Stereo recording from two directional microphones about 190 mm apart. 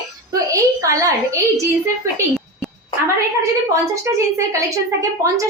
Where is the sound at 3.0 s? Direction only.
15° right (ahead or behind).